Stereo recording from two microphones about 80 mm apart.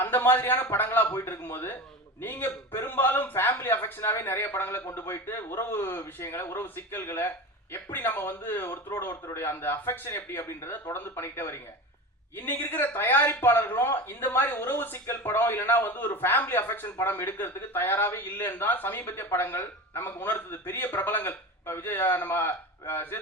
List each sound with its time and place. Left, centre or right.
0.0 s a man's voice: left